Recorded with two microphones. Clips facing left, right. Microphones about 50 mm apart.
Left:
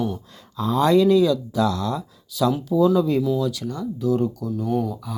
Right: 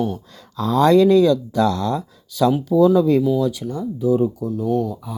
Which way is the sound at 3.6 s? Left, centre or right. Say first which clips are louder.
Right 2 dB; centre.